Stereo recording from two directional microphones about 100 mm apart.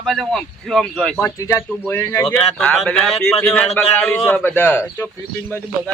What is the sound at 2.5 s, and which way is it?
A man's voice, 5° left (ahead or behind).